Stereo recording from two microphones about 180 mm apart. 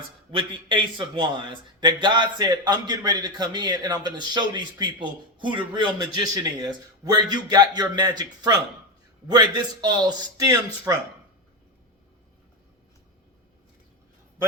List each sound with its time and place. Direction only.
0.3 s a man's voice: 25° right (ahead or behind)